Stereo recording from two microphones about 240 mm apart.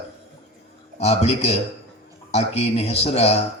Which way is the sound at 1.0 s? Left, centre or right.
Left.